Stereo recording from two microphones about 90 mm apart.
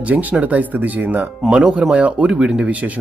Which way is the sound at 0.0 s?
15° right (ahead or behind).